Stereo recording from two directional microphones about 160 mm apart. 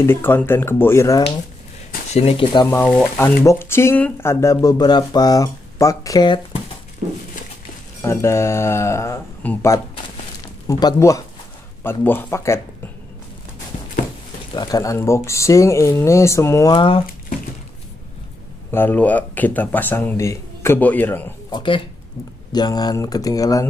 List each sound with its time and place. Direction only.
0.0 s speech: 15° left (ahead or behind)
2.1 s speech: 35° left (ahead or behind)
2.8 s speech: 10° left (ahead or behind); by 6.6 s 30° left (ahead or behind)
8.0 s speech: 15° left (ahead or behind)
10.7 s speech: 25° left (ahead or behind)
14.5 s speech: 25° left (ahead or behind)
18.7 s speech: 10° left (ahead or behind)
21.5 s speech: 30° left (ahead or behind)